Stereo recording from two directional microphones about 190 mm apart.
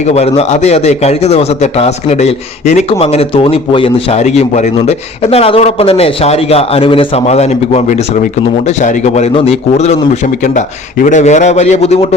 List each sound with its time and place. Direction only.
0.0 s a man's voice: 35° left (ahead or behind)
11.0 s a man's voice: 40° left (ahead or behind)